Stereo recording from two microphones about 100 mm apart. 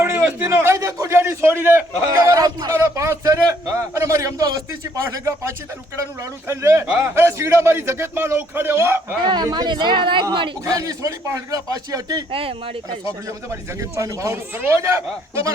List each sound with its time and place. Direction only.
0.0 s a sound: 20° right (ahead or behind)
0.5 s a man's voice: 30° right (ahead or behind)
2.0 s a man's voice: 35° right (ahead or behind)
9.2 s a woman's voice: 45° right (ahead or behind)
10.8 s a man's voice: 35° right (ahead or behind)
12.3 s speech: 65° right (ahead or behind)
14.0 s a man's voice: 30° right (ahead or behind)